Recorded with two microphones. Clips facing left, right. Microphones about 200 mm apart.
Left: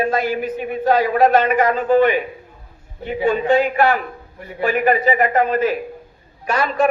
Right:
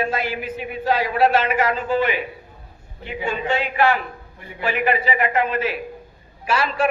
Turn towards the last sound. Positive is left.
turn(degrees=40)  # may be behind; listen again after turning